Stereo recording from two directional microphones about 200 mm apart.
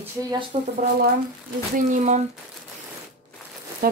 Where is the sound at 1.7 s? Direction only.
35° right (ahead or behind).